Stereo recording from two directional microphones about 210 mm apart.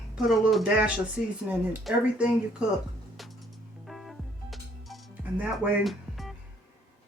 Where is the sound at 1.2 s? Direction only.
45° left (ahead or behind).